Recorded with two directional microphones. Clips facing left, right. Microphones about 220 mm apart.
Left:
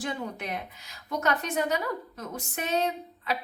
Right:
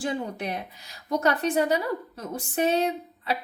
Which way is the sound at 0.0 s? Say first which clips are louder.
Right 4 dB; 30° right (ahead or behind).